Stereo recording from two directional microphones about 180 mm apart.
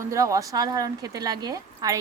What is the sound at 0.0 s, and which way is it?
A woman's voice, 15° right (ahead or behind).